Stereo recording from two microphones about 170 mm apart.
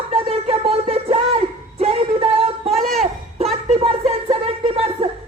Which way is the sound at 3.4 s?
35° right (ahead or behind).